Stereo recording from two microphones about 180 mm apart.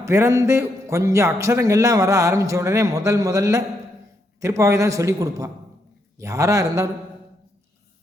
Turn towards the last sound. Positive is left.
turn(degrees=-15)  # may be behind; listen again after turning